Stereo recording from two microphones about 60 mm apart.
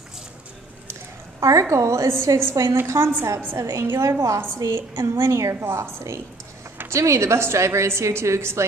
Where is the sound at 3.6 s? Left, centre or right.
Right.